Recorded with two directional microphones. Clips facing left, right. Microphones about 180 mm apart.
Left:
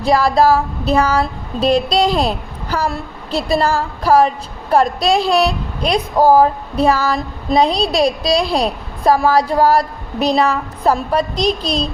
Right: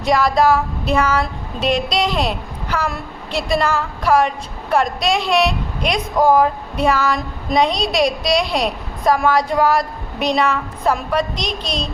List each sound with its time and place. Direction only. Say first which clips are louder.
0.0 s a woman's voice: left 2 dB; 30° left (ahead or behind)